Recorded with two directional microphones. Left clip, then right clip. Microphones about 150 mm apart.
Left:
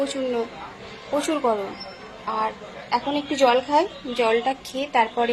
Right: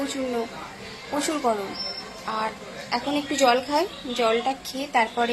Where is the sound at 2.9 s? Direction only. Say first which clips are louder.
Left 2 dB; 15° left (ahead or behind).